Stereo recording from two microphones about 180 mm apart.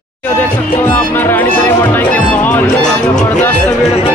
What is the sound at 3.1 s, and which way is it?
Speech, 45° left (ahead or behind).